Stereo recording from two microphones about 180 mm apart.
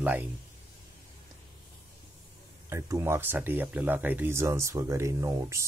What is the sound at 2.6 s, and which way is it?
A man's voice, 15° right (ahead or behind).